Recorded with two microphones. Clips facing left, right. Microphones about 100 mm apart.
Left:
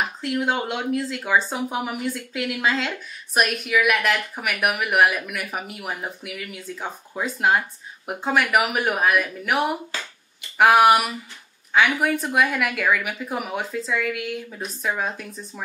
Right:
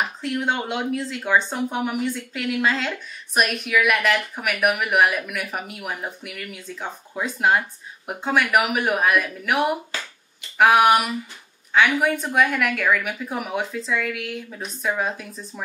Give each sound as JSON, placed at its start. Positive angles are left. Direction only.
{"t": 0.2, "sound": "a woman's voice", "side_deg": 0}